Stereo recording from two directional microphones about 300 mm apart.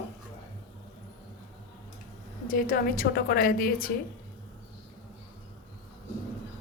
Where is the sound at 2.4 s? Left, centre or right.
Left.